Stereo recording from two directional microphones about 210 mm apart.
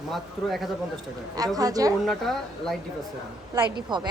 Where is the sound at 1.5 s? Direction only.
15° right (ahead or behind).